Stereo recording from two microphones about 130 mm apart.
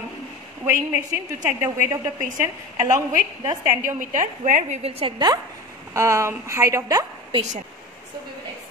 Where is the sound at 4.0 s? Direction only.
90° right.